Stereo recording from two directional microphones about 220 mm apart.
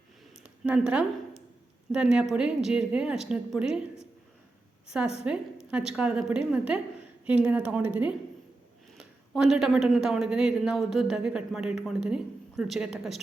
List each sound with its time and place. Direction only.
0.4 s a woman's voice: 5° right (ahead or behind)
4.9 s speech: 5° right (ahead or behind)